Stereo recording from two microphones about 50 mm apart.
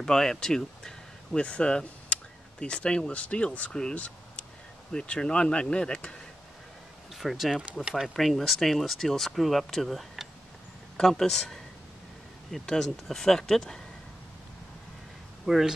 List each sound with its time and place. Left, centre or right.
0.0 s a sound: centre
1.4 s speech: left
3.9 s a sound: left
4.9 s speech: left
7.2 s speech: centre
7.8 s speech: centre
12.6 s speech: centre
15.4 s speech: centre